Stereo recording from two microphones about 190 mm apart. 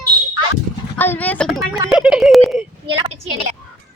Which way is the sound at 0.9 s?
10° left (ahead or behind).